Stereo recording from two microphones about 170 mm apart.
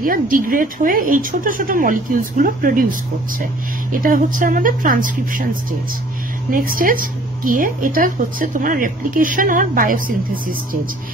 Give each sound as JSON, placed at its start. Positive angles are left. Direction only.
{"t": 0.0, "sound": "a woman's voice", "side_deg": -55}